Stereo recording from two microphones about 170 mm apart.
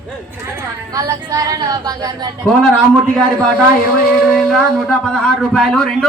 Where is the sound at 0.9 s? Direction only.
20° right (ahead or behind).